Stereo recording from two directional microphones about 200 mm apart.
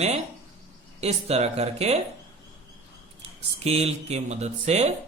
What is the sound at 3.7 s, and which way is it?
Speech, 30° right (ahead or behind).